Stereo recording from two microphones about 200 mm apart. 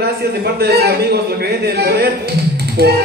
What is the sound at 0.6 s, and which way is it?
Speech, 50° right (ahead or behind).